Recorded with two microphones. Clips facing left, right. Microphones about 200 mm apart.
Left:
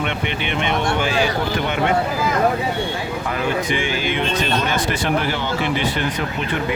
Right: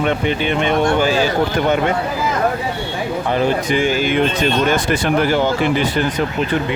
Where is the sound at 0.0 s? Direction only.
40° right (ahead or behind).